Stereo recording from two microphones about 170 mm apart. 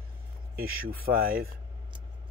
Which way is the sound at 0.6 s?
60° right (ahead or behind).